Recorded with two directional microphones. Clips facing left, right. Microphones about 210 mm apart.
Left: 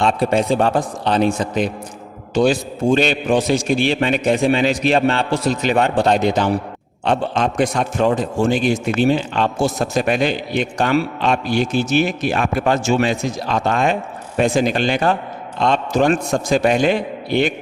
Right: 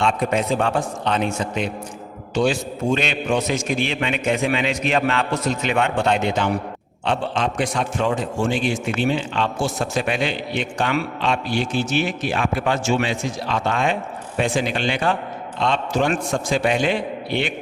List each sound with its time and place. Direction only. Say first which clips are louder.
0.0 s a man's voice: left 4 dB; 35° left (ahead or behind)